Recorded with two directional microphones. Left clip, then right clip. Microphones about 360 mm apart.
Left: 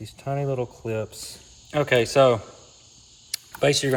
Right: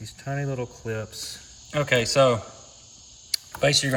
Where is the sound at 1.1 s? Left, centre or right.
Left.